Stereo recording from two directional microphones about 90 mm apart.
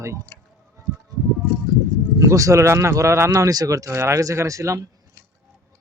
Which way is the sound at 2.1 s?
35° right (ahead or behind).